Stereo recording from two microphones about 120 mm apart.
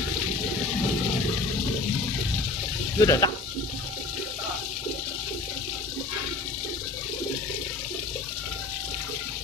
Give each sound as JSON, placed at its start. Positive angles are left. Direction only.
{"t": 3.0, "sound": "speech", "side_deg": 30}